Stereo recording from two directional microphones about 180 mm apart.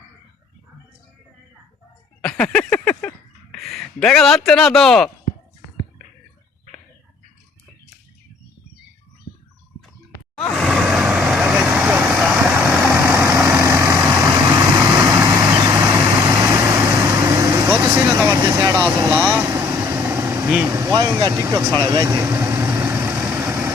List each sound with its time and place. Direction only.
2.2 s speech: 5° left (ahead or behind)
10.5 s vehicle: centre (ahead or behind); by 21.4 s 20° right (ahead or behind)
21.4 s speech: 15° right (ahead or behind)
21.8 s vehicle: 20° right (ahead or behind)